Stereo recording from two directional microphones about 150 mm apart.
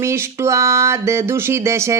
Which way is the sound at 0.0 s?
15° right (ahead or behind).